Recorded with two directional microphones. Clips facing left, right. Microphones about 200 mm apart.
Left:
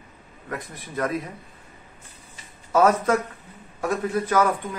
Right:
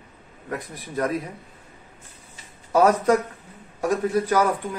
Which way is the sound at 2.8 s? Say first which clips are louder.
Right 2 dB; 15° right (ahead or behind).